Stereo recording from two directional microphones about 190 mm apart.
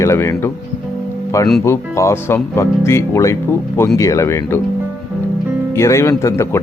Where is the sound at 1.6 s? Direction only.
15° left (ahead or behind).